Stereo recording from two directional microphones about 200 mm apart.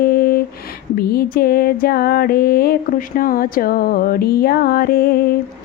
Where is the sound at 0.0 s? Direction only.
50° left (ahead or behind).